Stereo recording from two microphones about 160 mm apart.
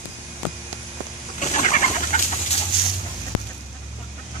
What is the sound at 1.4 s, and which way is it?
Chicken, 50° left (ahead or behind).